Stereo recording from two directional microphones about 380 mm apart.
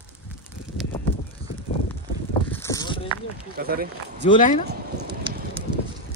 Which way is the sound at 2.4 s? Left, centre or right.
Centre.